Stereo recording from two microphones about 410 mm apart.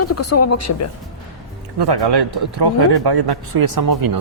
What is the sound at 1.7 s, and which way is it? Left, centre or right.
Speech, right.